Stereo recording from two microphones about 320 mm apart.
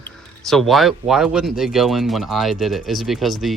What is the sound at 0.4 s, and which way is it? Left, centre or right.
Speech, centre.